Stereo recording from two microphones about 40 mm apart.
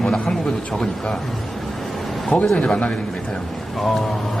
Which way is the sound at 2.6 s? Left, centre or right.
Left.